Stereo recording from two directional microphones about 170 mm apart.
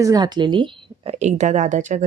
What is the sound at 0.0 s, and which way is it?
A woman's voice, 25° right (ahead or behind).